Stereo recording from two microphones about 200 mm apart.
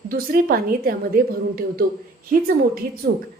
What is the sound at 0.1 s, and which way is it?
A woman's voice, 50° right (ahead or behind).